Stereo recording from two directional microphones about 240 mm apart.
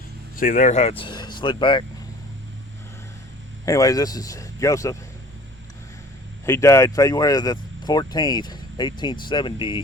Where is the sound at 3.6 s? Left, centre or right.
Centre.